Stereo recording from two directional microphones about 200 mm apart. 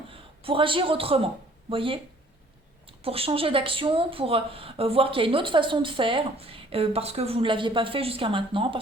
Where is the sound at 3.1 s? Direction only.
30° right (ahead or behind).